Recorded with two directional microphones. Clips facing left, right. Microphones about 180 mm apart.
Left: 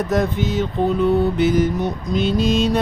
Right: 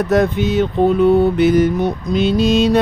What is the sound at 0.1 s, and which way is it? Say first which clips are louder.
Mantra: right 6 dB; 65° right (ahead or behind).